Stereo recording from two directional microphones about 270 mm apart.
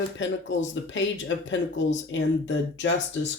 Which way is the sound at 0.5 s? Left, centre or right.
Left.